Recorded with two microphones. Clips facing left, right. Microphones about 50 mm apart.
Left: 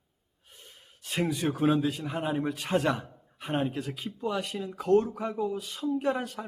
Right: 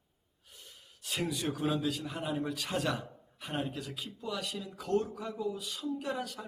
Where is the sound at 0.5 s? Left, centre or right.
Left.